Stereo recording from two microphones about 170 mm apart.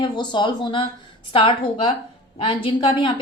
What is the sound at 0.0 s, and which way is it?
A woman's voice, 25° left (ahead or behind).